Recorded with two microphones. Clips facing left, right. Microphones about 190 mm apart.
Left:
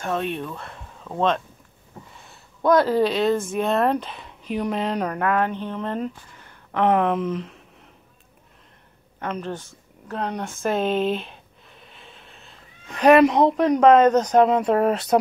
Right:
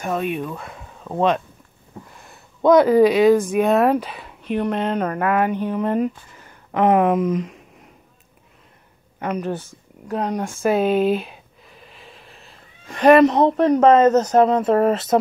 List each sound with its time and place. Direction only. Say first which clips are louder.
0.0 s speech: right 3 dB; 5° right (ahead or behind)
2.6 s speech: right 5 dB; 20° right (ahead or behind)
2.9 s speech: right 7 dB; 5° right (ahead or behind)
9.2 s speech: right 5 dB; 10° right (ahead or behind)